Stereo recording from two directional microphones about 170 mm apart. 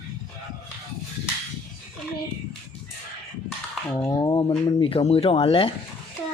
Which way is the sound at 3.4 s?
5° left (ahead or behind).